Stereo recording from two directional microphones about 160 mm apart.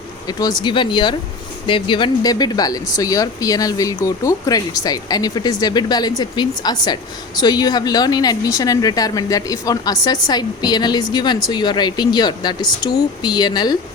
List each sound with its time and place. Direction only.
0.3 s speech: 25° left (ahead or behind)